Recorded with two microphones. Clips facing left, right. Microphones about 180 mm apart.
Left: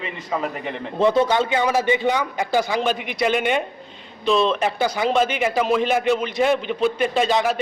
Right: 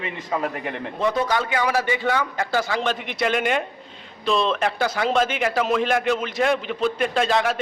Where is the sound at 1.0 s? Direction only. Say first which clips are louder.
Left 5 dB; 25° left (ahead or behind).